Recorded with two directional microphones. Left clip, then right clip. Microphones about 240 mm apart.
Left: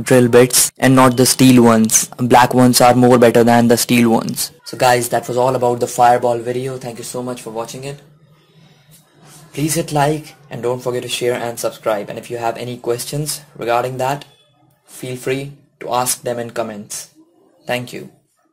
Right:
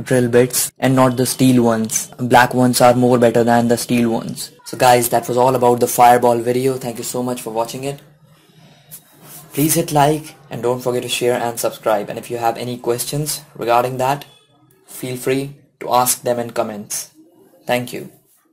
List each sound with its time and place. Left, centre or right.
0.0 s speech: left
4.6 s speech: centre
9.5 s speech: centre